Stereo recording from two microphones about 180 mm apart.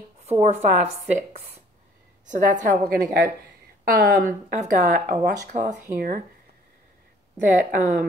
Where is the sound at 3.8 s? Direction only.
50° right (ahead or behind).